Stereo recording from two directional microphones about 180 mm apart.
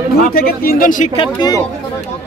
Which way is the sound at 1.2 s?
20° left (ahead or behind).